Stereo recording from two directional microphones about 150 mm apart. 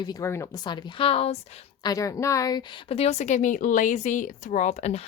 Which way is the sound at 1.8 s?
25° left (ahead or behind).